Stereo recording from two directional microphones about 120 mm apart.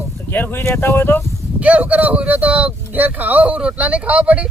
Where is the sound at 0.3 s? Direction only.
15° left (ahead or behind).